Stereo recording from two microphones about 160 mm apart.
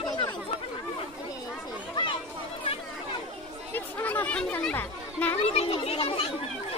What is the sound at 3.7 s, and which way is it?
Speech, 10° left (ahead or behind).